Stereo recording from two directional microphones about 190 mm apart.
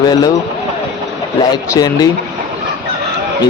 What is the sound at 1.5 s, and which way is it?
Speech, 20° left (ahead or behind).